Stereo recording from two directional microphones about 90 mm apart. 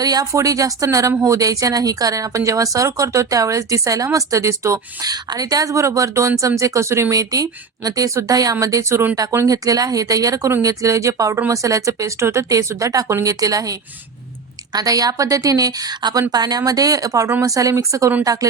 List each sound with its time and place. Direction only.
0.0 s speech: 45° right (ahead or behind)
5.1 s a woman's voice: 45° right (ahead or behind)